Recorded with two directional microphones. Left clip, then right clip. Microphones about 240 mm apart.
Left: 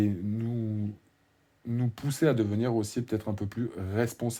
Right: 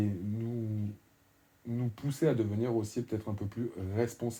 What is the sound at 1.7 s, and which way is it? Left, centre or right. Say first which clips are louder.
Speech: left 4 dB; left.